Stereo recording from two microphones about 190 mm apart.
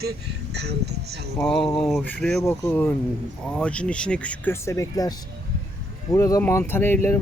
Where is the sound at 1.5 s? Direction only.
5° left (ahead or behind).